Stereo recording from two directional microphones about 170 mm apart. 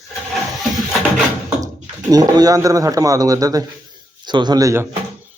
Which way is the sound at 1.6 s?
20° right (ahead or behind).